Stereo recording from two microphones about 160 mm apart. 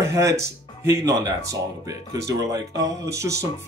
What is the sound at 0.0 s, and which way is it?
Speech, 20° right (ahead or behind).